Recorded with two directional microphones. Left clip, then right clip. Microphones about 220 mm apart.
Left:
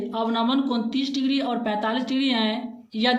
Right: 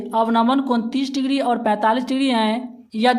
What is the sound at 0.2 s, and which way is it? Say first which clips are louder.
A woman's voice: right 7 dB; 40° right (ahead or behind).